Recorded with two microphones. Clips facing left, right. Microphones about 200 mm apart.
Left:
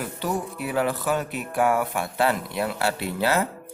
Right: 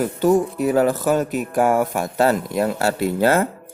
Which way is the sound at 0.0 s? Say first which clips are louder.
Right 11 dB; 45° right (ahead or behind).